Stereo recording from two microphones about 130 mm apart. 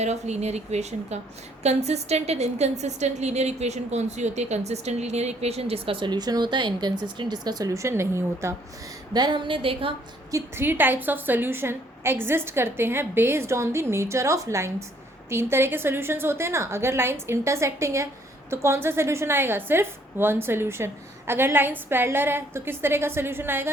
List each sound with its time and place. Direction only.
0.0 s a woman's voice: 60° right (ahead or behind); by 8.5 s 20° right (ahead or behind)
9.1 s a woman's voice: 35° right (ahead or behind)
10.3 s a woman's voice: 15° right (ahead or behind)